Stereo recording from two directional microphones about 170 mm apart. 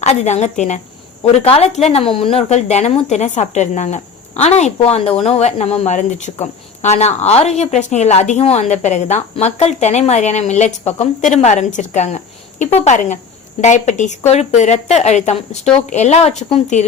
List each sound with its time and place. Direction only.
0.0 s a woman's voice: 40° left (ahead or behind)